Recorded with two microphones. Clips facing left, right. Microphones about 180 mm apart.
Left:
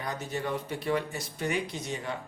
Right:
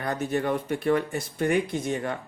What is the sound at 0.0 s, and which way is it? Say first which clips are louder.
Speech: right 7 dB; 55° right (ahead or behind).